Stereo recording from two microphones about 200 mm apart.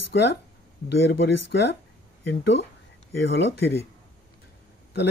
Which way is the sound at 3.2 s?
60° left (ahead or behind).